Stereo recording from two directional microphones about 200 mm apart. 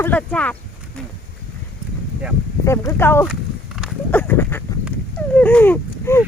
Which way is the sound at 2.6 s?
15° left (ahead or behind).